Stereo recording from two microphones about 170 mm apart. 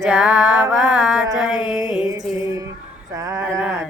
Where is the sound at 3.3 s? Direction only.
15° right (ahead or behind).